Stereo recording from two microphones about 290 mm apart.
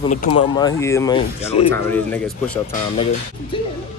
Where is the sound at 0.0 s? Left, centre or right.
Left.